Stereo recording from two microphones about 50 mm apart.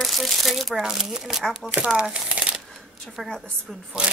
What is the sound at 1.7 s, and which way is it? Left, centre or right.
Speech, right.